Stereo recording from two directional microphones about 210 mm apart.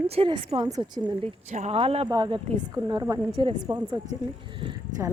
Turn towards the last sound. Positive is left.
turn(degrees=-25)  # may be behind; listen again after turning